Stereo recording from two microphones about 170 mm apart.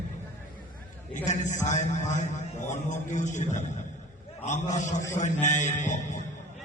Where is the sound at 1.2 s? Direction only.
45° left (ahead or behind).